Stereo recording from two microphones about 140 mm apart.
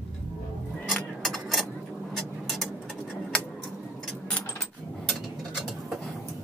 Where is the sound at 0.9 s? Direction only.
Centre (ahead or behind).